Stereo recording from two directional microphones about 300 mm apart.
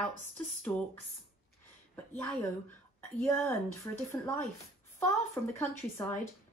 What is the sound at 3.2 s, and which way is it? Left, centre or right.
Speech, centre.